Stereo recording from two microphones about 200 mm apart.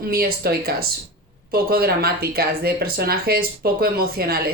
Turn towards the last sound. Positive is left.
turn(degrees=-50)  # may be behind; listen again after turning